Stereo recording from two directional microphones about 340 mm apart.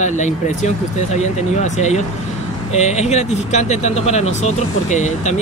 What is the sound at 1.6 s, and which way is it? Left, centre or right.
Speech, centre.